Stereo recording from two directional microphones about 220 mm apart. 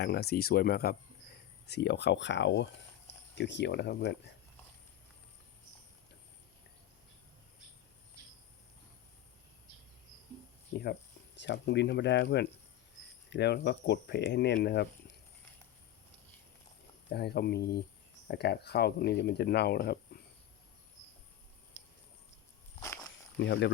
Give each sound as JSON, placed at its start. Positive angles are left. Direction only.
{"t": 0.0, "sound": "speech", "side_deg": 45}
{"t": 11.3, "sound": "speech", "side_deg": 50}
{"t": 17.1, "sound": "speech", "side_deg": 45}
{"t": 23.4, "sound": "speech", "side_deg": 50}